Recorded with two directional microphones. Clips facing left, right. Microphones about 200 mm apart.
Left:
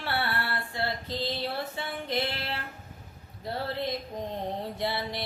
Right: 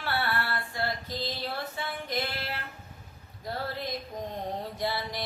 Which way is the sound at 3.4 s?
25° left (ahead or behind).